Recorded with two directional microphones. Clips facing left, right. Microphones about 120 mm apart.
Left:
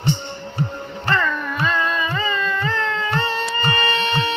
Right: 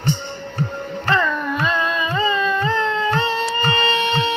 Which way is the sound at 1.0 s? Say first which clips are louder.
Right 2 dB; 20° right (ahead or behind).